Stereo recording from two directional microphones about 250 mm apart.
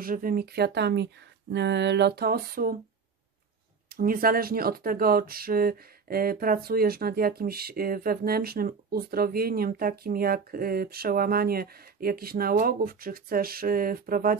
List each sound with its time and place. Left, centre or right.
0.0 s speech: right
3.9 s speech: right